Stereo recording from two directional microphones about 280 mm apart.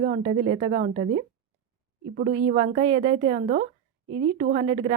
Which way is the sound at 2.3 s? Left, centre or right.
Right.